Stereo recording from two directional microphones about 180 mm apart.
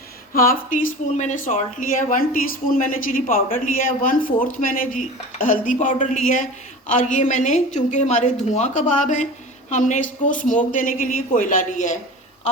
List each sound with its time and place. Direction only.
0.3 s speech: 50° left (ahead or behind)